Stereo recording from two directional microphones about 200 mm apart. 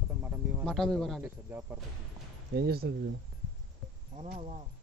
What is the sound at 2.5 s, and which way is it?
Speech, 50° right (ahead or behind).